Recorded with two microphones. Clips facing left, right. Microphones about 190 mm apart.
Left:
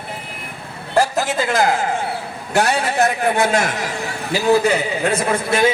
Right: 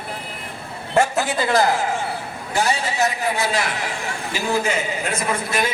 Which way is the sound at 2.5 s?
65° left (ahead or behind).